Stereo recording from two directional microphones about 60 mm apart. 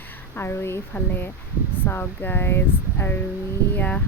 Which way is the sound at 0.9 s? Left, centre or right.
Left.